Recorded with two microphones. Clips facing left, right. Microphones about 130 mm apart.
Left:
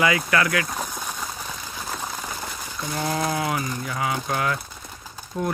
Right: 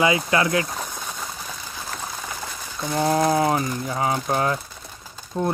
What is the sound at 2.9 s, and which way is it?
Speech, 25° right (ahead or behind).